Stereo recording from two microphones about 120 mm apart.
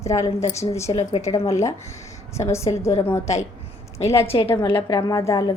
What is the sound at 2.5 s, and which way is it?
A woman's voice, 25° left (ahead or behind).